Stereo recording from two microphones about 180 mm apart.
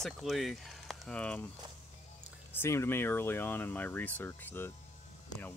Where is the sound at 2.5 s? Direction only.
15° left (ahead or behind).